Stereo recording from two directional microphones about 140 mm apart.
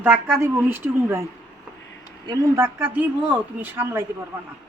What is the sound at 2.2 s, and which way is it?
A woman's voice, 20° right (ahead or behind).